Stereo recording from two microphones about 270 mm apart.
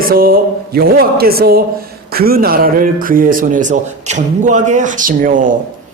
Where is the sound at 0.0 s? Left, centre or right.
Right.